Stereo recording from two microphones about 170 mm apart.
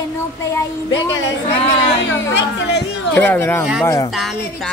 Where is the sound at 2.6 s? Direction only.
80° left.